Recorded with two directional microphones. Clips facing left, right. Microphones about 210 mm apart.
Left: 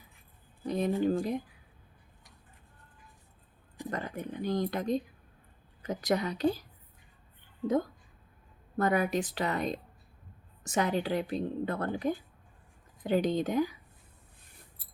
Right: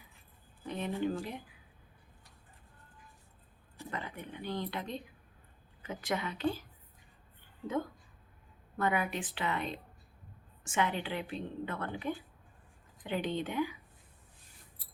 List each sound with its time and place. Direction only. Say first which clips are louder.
0.6 s a woman's voice: left 6 dB; 40° left (ahead or behind)
3.8 s a woman's voice: left 6 dB; 40° left (ahead or behind)
8.8 s a woman's voice: left 5 dB; 40° left (ahead or behind)